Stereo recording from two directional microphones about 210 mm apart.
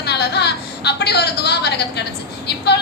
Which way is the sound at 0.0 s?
50° left (ahead or behind).